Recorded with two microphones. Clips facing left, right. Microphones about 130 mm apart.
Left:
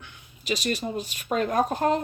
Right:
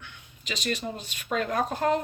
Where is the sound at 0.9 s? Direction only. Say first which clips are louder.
Left 3 dB; 20° left (ahead or behind).